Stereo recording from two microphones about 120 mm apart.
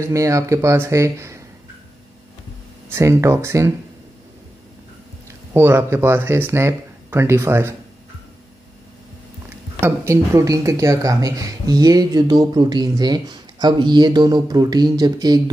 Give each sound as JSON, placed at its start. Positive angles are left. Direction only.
{"t": 0.0, "sound": "speech", "side_deg": -25}
{"t": 2.9, "sound": "speech", "side_deg": -25}
{"t": 5.5, "sound": "speech", "side_deg": -20}
{"t": 9.8, "sound": "speech", "side_deg": -25}